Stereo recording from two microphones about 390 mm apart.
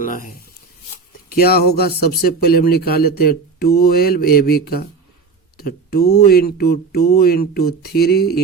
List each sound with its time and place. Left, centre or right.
0.0 s speech: left